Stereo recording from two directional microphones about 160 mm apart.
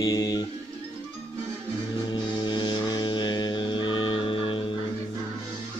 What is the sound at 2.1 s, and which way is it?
Music, 30° left (ahead or behind).